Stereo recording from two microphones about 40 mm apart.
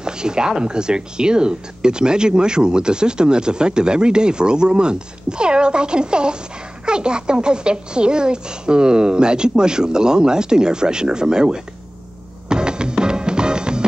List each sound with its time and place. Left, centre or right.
0.0 s speech: centre
12.4 s music: right